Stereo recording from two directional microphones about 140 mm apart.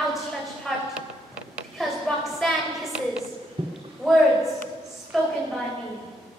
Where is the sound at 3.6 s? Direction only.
40° right (ahead or behind).